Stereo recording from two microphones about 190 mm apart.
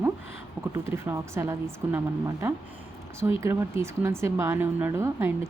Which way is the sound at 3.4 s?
15° right (ahead or behind).